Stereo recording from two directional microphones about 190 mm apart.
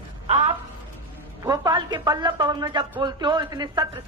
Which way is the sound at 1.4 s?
20° right (ahead or behind).